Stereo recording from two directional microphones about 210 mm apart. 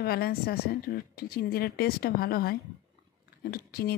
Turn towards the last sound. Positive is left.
turn(degrees=45)  # may be behind; listen again after turning